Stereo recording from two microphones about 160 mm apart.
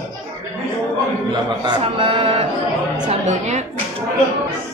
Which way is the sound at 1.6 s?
30° right (ahead or behind).